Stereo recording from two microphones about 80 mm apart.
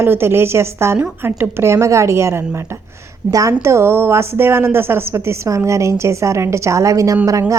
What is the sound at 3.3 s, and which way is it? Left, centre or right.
Speech, right.